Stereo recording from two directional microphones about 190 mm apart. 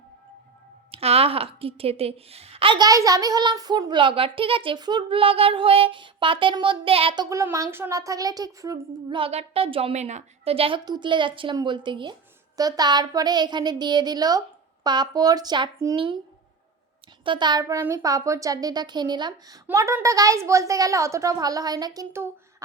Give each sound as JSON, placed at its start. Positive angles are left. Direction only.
{"t": 0.9, "sound": "a woman's voice", "side_deg": -30}
{"t": 7.3, "sound": "a woman's voice", "side_deg": -15}
{"t": 17.2, "sound": "a woman's voice", "side_deg": -25}